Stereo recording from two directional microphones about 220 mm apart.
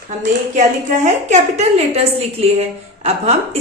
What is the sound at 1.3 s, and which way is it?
A woman's voice, 30° right (ahead or behind).